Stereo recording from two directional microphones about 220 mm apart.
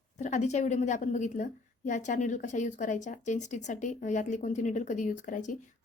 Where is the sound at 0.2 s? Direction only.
30° left (ahead or behind).